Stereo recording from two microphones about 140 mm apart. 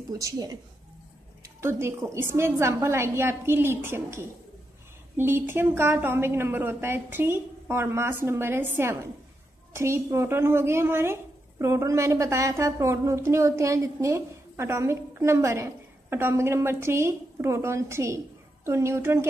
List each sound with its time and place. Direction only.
0.1 s a woman's voice: 25° right (ahead or behind)